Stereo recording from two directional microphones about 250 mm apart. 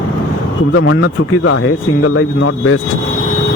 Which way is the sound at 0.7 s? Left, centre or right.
Left.